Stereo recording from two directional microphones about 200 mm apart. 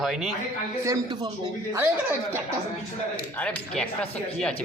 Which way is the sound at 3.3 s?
5° left (ahead or behind).